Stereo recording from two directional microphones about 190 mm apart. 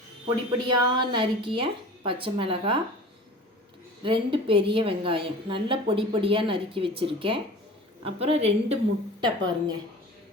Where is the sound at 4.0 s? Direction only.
25° right (ahead or behind).